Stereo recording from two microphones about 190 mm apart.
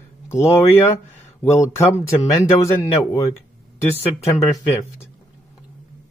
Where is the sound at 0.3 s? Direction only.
15° left (ahead or behind).